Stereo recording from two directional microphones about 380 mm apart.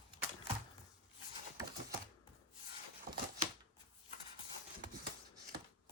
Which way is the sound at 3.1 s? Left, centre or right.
Right.